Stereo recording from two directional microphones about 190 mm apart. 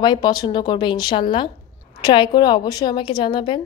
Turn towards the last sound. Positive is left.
turn(degrees=25)  # may be behind; listen again after turning